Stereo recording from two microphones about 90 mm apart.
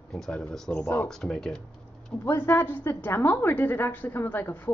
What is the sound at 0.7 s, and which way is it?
Speech, 20° left (ahead or behind).